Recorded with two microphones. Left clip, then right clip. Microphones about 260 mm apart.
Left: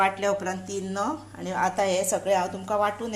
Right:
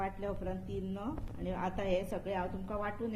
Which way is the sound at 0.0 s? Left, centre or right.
Left.